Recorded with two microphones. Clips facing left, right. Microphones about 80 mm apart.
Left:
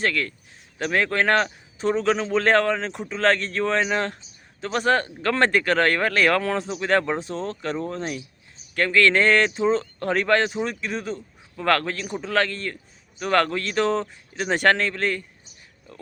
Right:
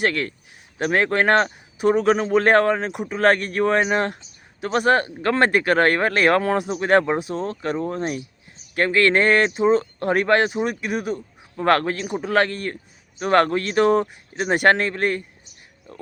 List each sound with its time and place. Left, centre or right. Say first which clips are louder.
0.1 s speech: right 1 dB; right
0.8 s speech: right 3 dB; right
1.3 s speech: right 3 dB; right
1.8 s speech: right 4 dB; centre
5.1 s speech: right 2 dB; centre
6.1 s speech: right 3 dB; right
11.8 s speech: right 4 dB; right
12.0 s speech: right 3 dB; centre
12.7 s speech: right 4 dB; right